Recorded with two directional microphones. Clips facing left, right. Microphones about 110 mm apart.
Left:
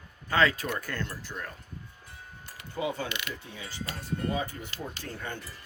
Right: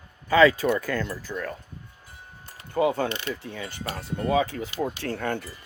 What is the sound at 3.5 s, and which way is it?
Speech, 60° right (ahead or behind).